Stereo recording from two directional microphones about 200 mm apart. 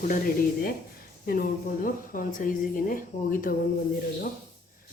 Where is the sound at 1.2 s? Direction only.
45° left (ahead or behind).